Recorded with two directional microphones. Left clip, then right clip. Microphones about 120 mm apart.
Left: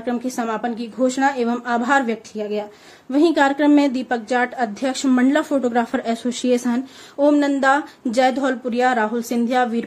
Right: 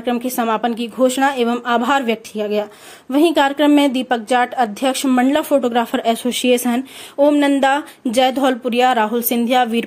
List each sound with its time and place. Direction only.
0.0 s speech: 15° right (ahead or behind)
5.0 s speech: 5° right (ahead or behind); by 9.8 s 20° right (ahead or behind)